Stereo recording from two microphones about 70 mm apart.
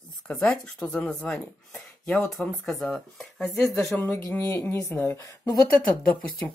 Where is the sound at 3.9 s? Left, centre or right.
Left.